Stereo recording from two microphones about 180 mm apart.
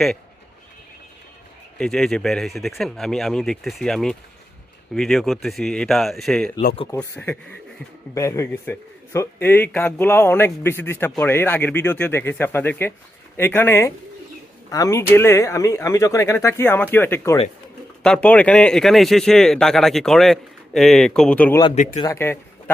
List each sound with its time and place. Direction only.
1.8 s speech: centre (ahead or behind)
6.9 s a man's voice: 15° left (ahead or behind)